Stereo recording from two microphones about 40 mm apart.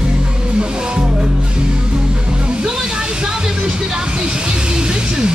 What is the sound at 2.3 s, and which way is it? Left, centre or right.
Music, right.